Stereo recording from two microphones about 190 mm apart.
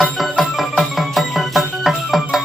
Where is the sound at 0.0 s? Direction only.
Centre (ahead or behind).